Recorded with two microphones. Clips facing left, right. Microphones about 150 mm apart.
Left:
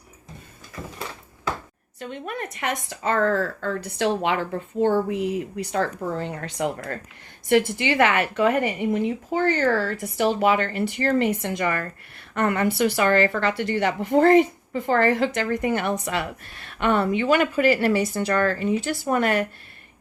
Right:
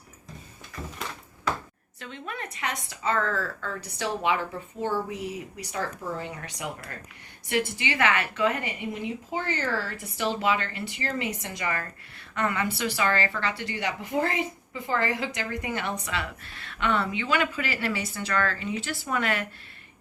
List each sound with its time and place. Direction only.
2.0 s speech: 50° left (ahead or behind)